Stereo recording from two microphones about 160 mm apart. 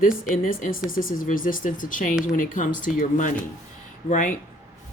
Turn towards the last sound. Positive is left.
turn(degrees=55)  # may be behind; listen again after turning